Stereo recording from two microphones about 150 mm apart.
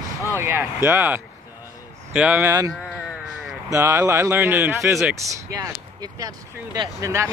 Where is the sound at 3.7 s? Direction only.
15° right (ahead or behind).